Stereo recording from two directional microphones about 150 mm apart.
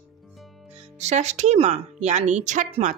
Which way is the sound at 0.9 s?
50° right (ahead or behind).